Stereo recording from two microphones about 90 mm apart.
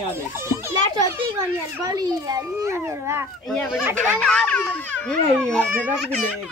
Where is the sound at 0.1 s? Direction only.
30° right (ahead or behind).